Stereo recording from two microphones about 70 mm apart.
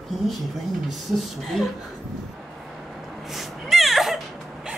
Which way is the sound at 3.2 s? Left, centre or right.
Centre.